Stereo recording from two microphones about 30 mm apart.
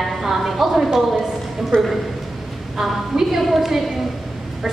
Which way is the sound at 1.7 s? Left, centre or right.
Left.